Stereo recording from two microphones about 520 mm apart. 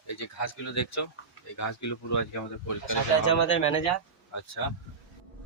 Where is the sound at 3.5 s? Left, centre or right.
Left.